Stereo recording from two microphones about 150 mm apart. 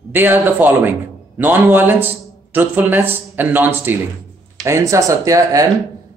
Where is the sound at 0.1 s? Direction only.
15° right (ahead or behind).